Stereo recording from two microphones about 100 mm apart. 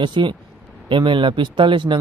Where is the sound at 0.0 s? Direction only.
50° right (ahead or behind).